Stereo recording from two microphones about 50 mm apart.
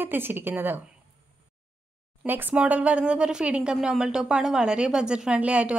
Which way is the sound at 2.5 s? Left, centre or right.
Right.